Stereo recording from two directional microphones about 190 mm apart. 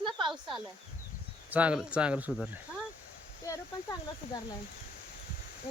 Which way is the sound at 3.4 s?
15° left (ahead or behind).